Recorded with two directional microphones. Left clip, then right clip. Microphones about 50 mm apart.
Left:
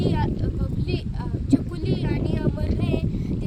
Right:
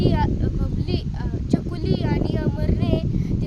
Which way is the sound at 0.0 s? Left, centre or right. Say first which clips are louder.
Right 3 dB; right.